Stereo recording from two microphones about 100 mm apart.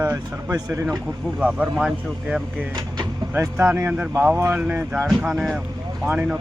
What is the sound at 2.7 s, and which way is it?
Vehicle, 45° right (ahead or behind).